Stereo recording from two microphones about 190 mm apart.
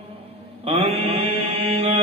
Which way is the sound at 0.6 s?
30° right (ahead or behind).